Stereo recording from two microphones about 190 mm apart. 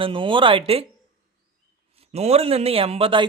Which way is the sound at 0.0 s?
25° right (ahead or behind).